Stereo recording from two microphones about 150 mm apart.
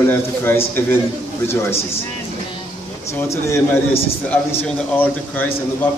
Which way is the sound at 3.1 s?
20° left (ahead or behind).